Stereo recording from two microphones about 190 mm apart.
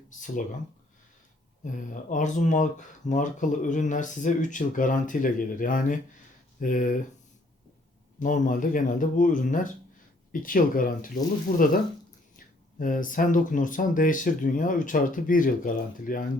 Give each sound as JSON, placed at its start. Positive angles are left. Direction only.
{"t": 1.6, "sound": "speech", "side_deg": 45}
{"t": 8.2, "sound": "speech", "side_deg": 45}
{"t": 12.8, "sound": "speech", "side_deg": 45}